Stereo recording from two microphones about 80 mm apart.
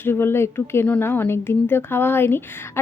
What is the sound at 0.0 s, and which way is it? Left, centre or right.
Speech, left.